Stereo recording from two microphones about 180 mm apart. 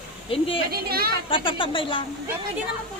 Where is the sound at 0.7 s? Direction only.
60° right (ahead or behind).